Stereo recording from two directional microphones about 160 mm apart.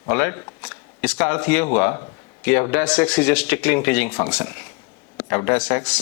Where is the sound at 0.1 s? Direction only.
10° left (ahead or behind).